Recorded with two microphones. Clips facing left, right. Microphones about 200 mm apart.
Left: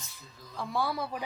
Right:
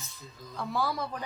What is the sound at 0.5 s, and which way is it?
Speech, centre (ahead or behind).